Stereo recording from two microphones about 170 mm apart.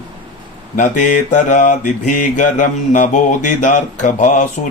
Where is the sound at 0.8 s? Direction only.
50° left (ahead or behind).